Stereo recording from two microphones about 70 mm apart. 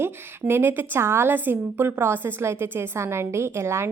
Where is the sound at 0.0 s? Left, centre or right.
Right.